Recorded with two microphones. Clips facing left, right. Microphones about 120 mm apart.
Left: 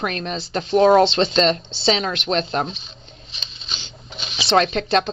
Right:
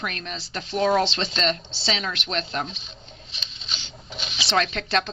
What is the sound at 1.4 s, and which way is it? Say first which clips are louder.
Speech: left 8 dB; 25° left (ahead or behind).